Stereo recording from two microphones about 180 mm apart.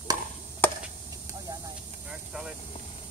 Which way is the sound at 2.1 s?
5° right (ahead or behind).